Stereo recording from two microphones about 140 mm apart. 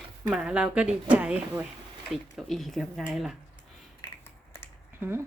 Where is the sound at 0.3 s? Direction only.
5° right (ahead or behind).